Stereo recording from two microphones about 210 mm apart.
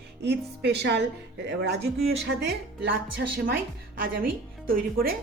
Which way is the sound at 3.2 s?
45° right (ahead or behind).